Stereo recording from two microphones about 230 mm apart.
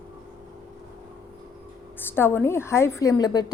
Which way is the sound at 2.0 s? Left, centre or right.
Centre.